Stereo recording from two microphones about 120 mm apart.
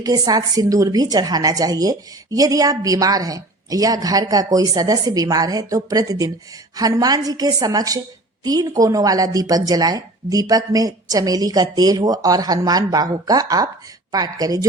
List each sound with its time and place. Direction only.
0.0 s a woman's voice: 30° right (ahead or behind)